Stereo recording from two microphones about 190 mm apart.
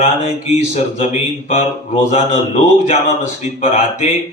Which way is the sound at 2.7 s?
35° left (ahead or behind).